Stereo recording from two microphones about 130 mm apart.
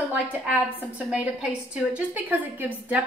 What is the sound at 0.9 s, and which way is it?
A woman's voice, 10° right (ahead or behind).